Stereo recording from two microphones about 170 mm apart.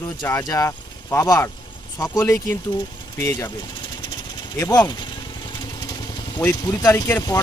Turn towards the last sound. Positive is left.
turn(degrees=10)  # may be behind; listen again after turning